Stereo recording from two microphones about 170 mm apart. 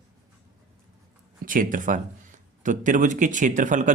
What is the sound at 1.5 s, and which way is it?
Speech, 50° right (ahead or behind).